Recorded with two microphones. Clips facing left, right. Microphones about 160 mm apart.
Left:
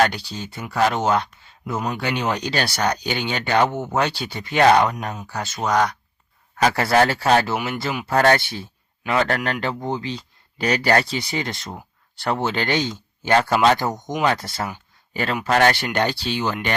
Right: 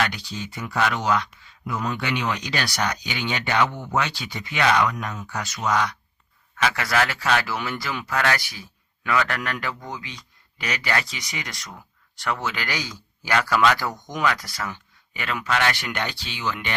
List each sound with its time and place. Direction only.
0.0 s speech: 30° left (ahead or behind)
5.5 s speech: 45° left (ahead or behind)